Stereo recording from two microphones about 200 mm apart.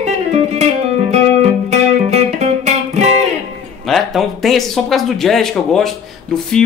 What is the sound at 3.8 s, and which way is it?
Speech, centre (ahead or behind).